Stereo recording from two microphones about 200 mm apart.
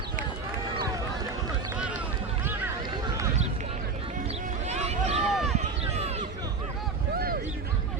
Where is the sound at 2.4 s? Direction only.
10° right (ahead or behind).